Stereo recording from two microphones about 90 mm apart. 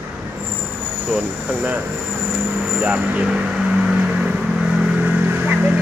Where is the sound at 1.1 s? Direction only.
10° right (ahead or behind).